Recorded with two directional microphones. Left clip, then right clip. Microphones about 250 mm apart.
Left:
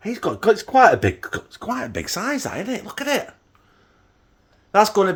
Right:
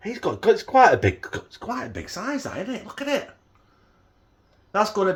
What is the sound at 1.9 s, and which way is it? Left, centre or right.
Speech, left.